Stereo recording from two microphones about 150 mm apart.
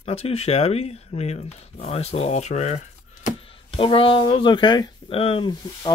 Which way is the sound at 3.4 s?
35° left (ahead or behind).